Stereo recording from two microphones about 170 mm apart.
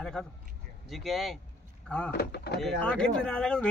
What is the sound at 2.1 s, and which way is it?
Speech, 70° left (ahead or behind).